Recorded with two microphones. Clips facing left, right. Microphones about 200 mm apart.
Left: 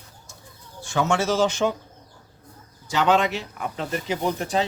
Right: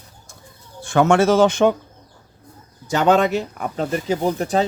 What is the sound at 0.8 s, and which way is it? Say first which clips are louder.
Speech: right 8 dB; 55° right (ahead or behind).